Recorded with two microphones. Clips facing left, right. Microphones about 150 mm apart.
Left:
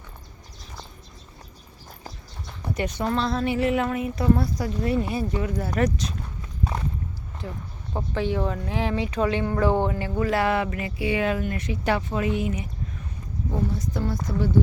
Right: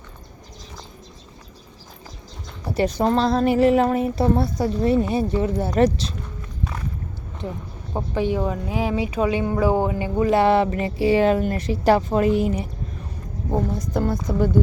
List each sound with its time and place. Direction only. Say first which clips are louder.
2.6 s a woman's voice: right 6 dB; 35° right (ahead or behind)
7.9 s a woman's voice: right 3 dB; 15° right (ahead or behind); by 14.5 s 55° right (ahead or behind)